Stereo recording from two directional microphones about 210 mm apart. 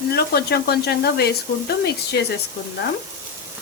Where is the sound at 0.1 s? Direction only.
50° left (ahead or behind).